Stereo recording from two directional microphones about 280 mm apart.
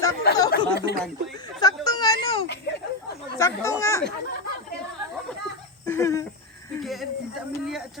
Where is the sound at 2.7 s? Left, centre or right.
Left.